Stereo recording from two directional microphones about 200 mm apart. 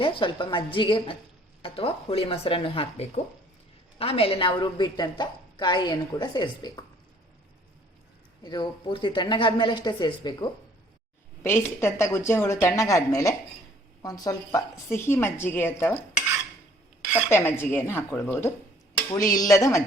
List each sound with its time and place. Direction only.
0.0 s a woman's voice: 25° left (ahead or behind)
8.4 s a woman's voice: 20° left (ahead or behind)
17.2 s a woman's voice: 10° left (ahead or behind)